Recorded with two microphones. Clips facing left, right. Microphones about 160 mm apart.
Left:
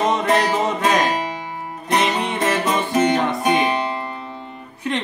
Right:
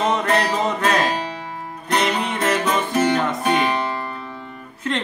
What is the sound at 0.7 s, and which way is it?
Music, 15° left (ahead or behind).